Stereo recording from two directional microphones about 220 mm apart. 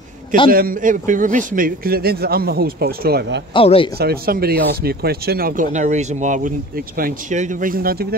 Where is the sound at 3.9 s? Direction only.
45° right (ahead or behind).